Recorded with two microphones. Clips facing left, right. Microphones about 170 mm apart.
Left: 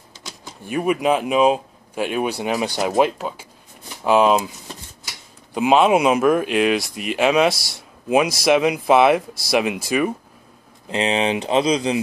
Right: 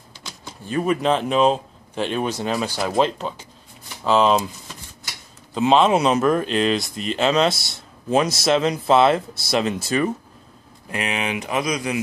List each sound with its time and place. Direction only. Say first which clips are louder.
0.5 s speech: left 1 dB; 15° left (ahead or behind)
5.5 s speech: left 1 dB; 10° left (ahead or behind)
10.9 s speech: left 6 dB; 30° left (ahead or behind)